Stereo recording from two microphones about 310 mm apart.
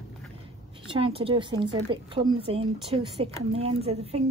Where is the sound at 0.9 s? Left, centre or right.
Centre.